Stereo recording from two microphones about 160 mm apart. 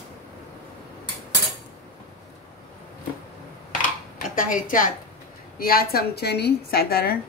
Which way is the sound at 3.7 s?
55° left (ahead or behind).